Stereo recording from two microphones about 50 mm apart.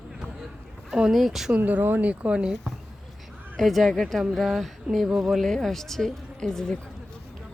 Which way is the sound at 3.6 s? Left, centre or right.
Centre.